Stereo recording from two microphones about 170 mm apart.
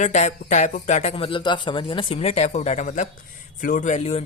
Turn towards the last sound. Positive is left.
turn(degrees=40)  # may be behind; listen again after turning